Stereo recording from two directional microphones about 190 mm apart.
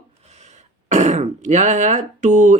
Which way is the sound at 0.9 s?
40° right (ahead or behind).